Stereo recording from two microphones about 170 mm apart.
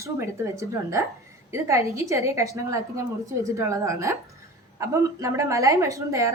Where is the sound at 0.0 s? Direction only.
15° right (ahead or behind).